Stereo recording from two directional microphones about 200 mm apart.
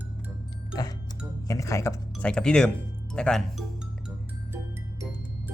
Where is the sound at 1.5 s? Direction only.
15° left (ahead or behind).